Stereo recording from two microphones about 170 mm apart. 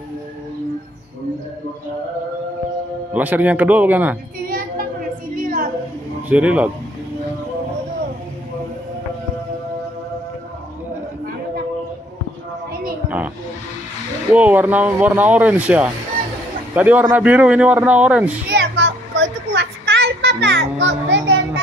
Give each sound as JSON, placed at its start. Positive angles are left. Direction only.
{"t": 3.1, "sound": "speech", "side_deg": -10}
{"t": 5.3, "sound": "a sound", "side_deg": -55}
{"t": 6.2, "sound": "a man's voice", "side_deg": -5}
{"t": 14.3, "sound": "speech", "side_deg": -10}
{"t": 18.5, "sound": "child singing", "side_deg": -90}